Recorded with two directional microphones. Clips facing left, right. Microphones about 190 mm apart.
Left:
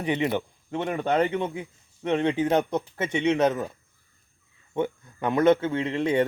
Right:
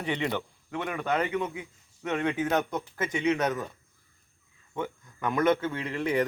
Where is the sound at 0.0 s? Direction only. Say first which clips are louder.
Left 5 dB; 20° left (ahead or behind).